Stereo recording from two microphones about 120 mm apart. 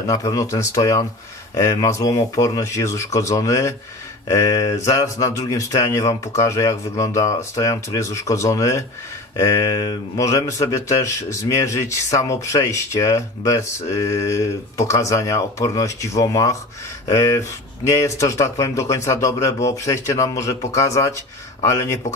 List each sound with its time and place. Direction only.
0.0 s speech: 30° left (ahead or behind)